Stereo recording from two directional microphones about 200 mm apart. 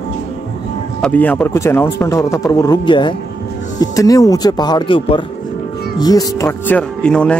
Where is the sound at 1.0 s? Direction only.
10° left (ahead or behind).